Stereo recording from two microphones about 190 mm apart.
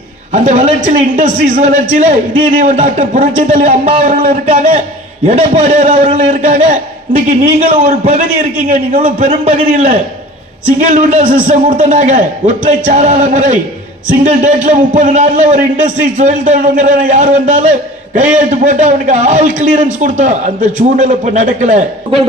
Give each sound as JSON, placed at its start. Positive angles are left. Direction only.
{"t": 0.3, "sound": "a man's voice", "side_deg": -40}